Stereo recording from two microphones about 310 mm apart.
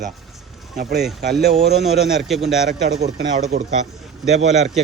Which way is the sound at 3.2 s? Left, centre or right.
Right.